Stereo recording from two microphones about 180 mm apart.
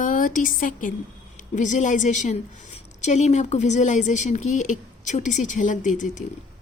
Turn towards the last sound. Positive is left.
turn(degrees=45)  # may be behind; listen again after turning